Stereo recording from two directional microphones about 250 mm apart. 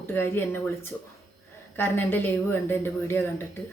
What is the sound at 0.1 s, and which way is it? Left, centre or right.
Speech, centre.